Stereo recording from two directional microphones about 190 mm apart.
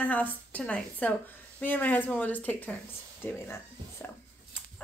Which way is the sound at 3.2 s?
10° left (ahead or behind).